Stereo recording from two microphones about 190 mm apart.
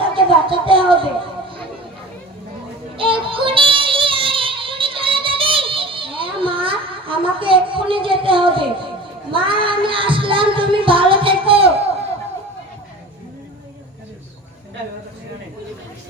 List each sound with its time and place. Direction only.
0.0 s speech: 25° right (ahead or behind)
3.0 s music: 25° right (ahead or behind)